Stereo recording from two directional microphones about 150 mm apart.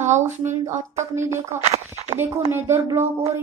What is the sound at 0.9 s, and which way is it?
Speech, 20° right (ahead or behind).